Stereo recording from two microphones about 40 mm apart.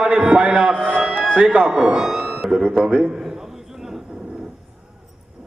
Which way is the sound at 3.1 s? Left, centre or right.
Centre.